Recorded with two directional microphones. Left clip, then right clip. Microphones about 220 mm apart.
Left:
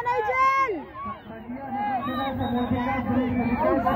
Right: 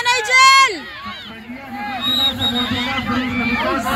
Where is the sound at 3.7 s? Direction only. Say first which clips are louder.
Right 3 dB; 40° right (ahead or behind).